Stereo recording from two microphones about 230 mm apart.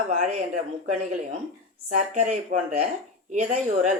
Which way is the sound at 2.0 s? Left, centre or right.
Right.